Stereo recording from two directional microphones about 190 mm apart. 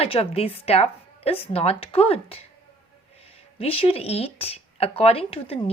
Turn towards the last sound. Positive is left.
turn(degrees=30)  # may be behind; listen again after turning